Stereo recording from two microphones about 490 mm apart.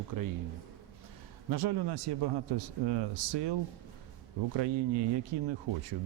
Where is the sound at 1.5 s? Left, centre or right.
Right.